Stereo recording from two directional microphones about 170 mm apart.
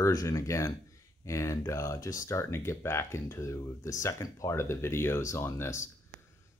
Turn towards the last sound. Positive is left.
turn(degrees=15)  # may be behind; listen again after turning